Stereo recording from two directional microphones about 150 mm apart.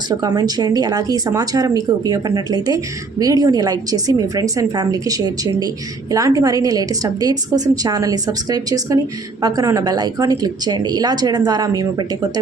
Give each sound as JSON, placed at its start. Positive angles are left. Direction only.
{"t": 0.1, "sound": "speech", "side_deg": -25}